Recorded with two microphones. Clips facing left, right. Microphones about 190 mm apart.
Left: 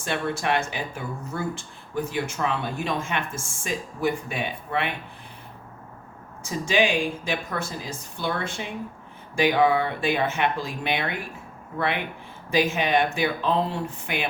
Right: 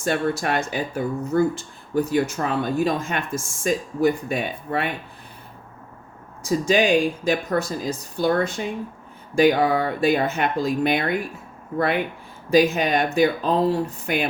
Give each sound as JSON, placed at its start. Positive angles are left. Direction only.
{"t": 0.0, "sound": "speech", "side_deg": -40}
{"t": 6.4, "sound": "speech", "side_deg": -40}
{"t": 12.5, "sound": "speech", "side_deg": -40}